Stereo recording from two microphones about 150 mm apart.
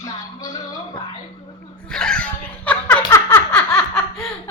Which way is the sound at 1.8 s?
5° left (ahead or behind).